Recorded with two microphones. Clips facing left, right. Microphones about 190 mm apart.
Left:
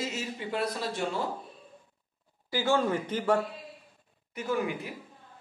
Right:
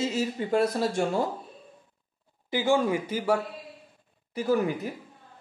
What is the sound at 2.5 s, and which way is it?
Speech, 15° right (ahead or behind).